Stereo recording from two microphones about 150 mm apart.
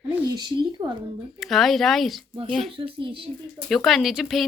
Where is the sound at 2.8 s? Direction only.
35° right (ahead or behind).